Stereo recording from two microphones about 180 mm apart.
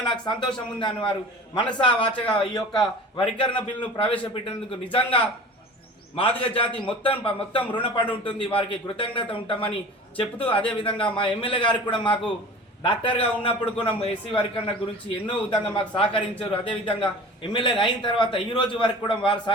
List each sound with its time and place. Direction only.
0.3 s a man's voice: 25° left (ahead or behind)
6.1 s a man's voice: 30° left (ahead or behind)